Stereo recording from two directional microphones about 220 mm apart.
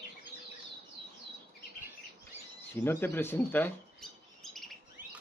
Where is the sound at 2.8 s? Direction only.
10° left (ahead or behind).